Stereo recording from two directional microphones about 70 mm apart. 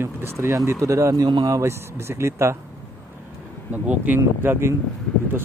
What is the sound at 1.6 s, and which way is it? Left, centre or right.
Speech, right.